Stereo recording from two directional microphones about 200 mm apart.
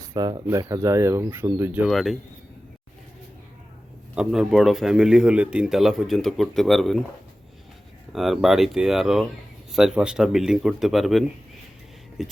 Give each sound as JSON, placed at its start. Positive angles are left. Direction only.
{"t": 0.1, "sound": "speech", "side_deg": -20}
{"t": 4.1, "sound": "a man's voice", "side_deg": -5}
{"t": 8.1, "sound": "a man's voice", "side_deg": 0}